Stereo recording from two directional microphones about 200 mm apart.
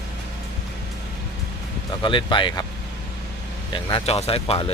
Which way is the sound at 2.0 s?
25° left (ahead or behind).